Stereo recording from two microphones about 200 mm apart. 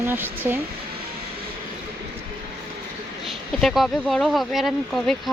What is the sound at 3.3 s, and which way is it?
Speech, centre (ahead or behind).